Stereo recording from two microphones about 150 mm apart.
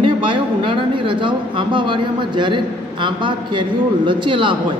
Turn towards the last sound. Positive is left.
turn(degrees=-35)  # may be behind; listen again after turning